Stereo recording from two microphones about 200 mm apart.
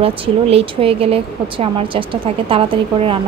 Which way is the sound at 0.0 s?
30° right (ahead or behind).